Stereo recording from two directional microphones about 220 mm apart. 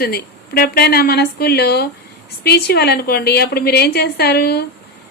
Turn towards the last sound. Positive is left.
turn(degrees=45)  # may be behind; listen again after turning